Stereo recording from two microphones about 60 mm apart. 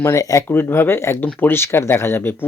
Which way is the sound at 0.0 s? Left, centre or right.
Left.